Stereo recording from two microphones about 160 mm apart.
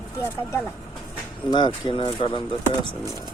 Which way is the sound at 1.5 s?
30° left (ahead or behind).